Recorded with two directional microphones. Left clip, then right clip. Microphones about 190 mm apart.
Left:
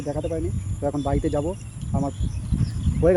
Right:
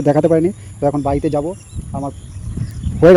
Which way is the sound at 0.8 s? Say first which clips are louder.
Right 8 dB; 30° right (ahead or behind).